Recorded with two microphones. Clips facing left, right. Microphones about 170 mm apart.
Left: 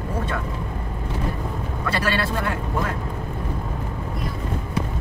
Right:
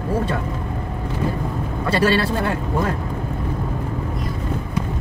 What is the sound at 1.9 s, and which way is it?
Speech, 30° right (ahead or behind).